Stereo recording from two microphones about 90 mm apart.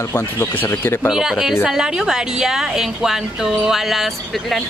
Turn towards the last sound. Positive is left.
turn(degrees=0)  # may be behind; listen again after turning